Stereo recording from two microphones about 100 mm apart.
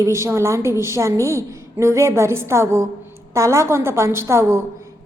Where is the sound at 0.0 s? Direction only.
30° right (ahead or behind).